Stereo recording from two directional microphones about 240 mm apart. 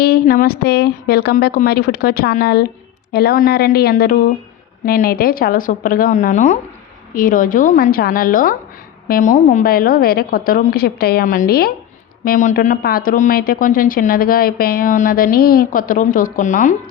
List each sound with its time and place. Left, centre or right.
0.0 s speech: left